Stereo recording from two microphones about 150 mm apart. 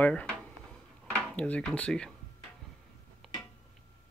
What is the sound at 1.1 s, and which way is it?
Speech, 10° left (ahead or behind).